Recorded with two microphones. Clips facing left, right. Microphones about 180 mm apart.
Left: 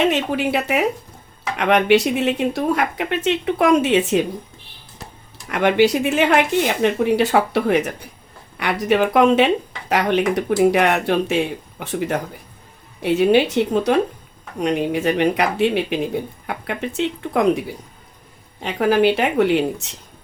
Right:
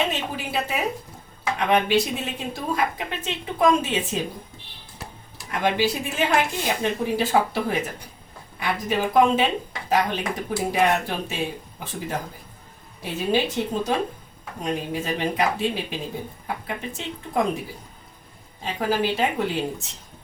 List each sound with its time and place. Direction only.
0.0 s speech: 70° left (ahead or behind)
5.5 s speech: 70° left (ahead or behind)
14.6 s speech: 70° left (ahead or behind)
18.6 s speech: 70° left (ahead or behind)